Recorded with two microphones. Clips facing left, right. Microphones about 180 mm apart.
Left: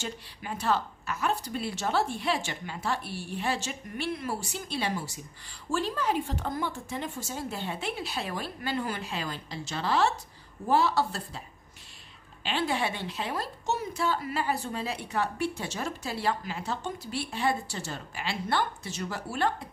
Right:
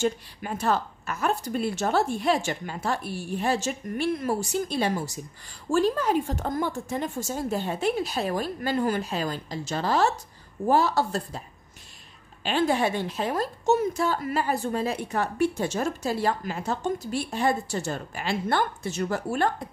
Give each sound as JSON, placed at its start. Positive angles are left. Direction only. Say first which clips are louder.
{"t": 0.0, "sound": "a woman's voice", "louder": "right 11 dB", "side_deg": -45}
{"t": 12.4, "sound": "a woman's voice", "louder": "right 6 dB", "side_deg": -45}